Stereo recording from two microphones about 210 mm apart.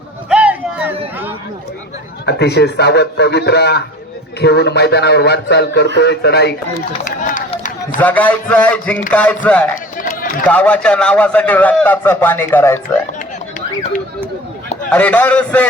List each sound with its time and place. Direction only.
0.3 s a sound: 5° right (ahead or behind)
2.2 s speech: 50° left (ahead or behind)
7.0 s speech: 35° left (ahead or behind)
8.0 s a man's voice: 5° left (ahead or behind)
10.0 s run: 40° left (ahead or behind)
10.5 s a man's voice: 5° left (ahead or behind)
14.8 s a man's voice: 5° left (ahead or behind)